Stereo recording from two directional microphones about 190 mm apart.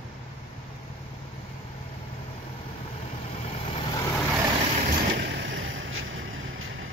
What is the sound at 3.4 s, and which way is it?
Vehicle, 30° left (ahead or behind).